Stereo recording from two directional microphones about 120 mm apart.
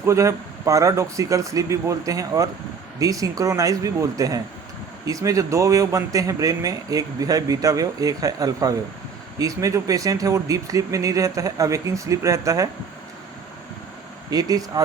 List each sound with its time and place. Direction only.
0.0 s speech: 25° right (ahead or behind)
14.3 s speech: 30° right (ahead or behind)